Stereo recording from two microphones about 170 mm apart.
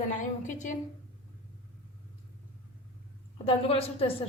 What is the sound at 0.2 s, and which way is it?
Speech, 45° left (ahead or behind).